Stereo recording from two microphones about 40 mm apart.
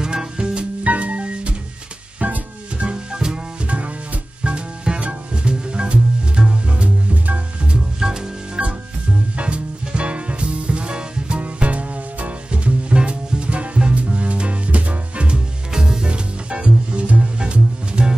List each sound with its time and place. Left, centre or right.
0.8 s music: right
2.9 s music: centre
3.6 s music: right
8.0 s music: centre
8.6 s music: right